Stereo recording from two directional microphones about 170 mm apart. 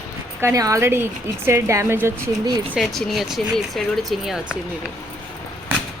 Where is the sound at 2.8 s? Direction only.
Centre (ahead or behind).